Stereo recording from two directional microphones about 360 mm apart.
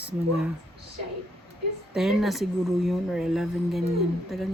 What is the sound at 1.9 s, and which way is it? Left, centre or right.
Speech, centre.